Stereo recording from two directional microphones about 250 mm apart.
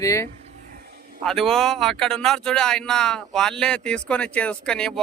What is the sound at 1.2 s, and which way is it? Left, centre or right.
Speech, centre.